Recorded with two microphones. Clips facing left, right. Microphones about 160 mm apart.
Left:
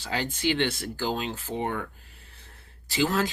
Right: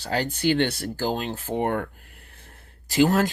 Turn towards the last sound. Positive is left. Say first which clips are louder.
# right 6 dB
turn(degrees=-50)  # may be behind; listen again after turning